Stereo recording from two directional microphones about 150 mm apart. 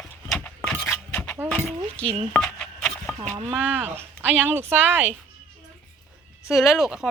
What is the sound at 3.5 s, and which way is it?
Speech, 10° right (ahead or behind).